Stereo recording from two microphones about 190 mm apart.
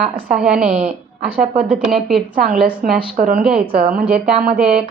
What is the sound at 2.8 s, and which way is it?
Speech, 45° right (ahead or behind).